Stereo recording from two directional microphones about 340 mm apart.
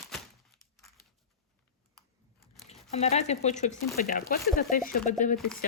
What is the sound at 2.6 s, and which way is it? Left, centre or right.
Speech, centre.